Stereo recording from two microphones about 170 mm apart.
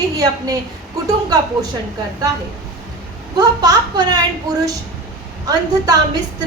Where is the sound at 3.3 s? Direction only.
20° right (ahead or behind).